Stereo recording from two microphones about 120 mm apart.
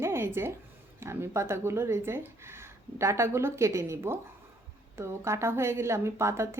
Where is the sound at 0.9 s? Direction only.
20° right (ahead or behind).